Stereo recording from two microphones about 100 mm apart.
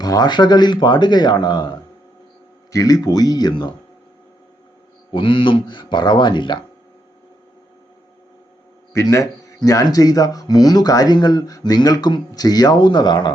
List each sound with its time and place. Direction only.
0.0 s speech: 40° left (ahead or behind)
2.7 s speech: 35° left (ahead or behind)
5.1 s speech: 60° left (ahead or behind)
8.9 s speech: 30° left (ahead or behind)